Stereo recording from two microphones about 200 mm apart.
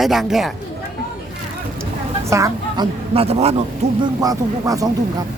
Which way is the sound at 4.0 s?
20° right (ahead or behind).